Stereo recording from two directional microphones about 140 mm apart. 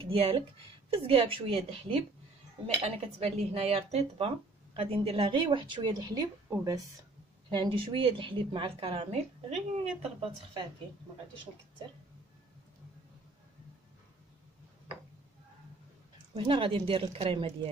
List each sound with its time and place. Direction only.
0.0 s a woman's voice: 45° right (ahead or behind); by 6.8 s 25° right (ahead or behind)
7.4 s a woman's voice: 35° right (ahead or behind)
16.3 s a woman's voice: 40° right (ahead or behind)